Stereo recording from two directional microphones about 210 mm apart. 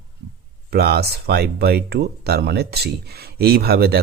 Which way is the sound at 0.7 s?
50° right (ahead or behind).